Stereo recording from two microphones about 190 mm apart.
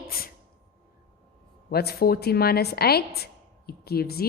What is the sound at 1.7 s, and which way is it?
A woman's voice, 55° left (ahead or behind).